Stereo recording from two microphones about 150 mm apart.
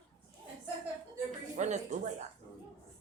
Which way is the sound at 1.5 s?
55° right (ahead or behind).